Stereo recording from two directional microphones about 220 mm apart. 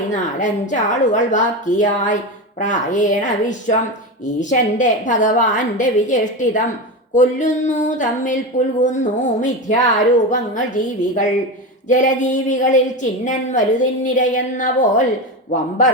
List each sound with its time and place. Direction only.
0.1 s a woman's voice: 35° left (ahead or behind)